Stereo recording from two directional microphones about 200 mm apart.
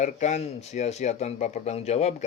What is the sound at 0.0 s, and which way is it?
A man's voice, 35° left (ahead or behind).